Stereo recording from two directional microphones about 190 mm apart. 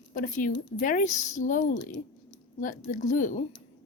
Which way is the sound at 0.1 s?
45° left (ahead or behind).